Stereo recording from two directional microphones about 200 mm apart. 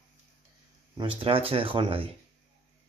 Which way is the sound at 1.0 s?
25° right (ahead or behind).